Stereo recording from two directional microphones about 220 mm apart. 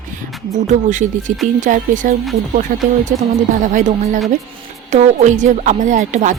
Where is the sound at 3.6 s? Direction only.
35° right (ahead or behind).